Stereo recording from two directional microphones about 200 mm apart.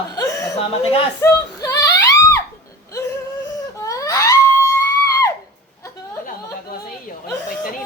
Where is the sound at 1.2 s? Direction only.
15° left (ahead or behind).